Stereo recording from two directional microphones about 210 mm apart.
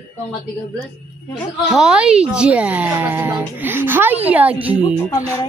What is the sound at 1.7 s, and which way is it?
Speech, 5° right (ahead or behind).